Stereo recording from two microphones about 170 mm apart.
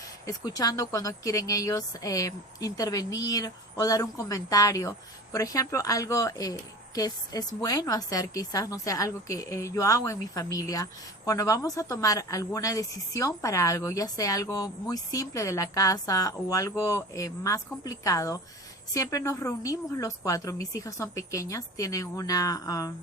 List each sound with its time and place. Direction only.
0.3 s a woman's voice: 20° left (ahead or behind)